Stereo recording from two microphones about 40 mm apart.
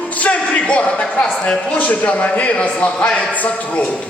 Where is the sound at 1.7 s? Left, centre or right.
Left.